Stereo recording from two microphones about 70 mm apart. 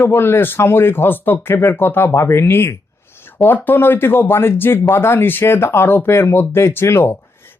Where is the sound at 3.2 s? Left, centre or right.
Left.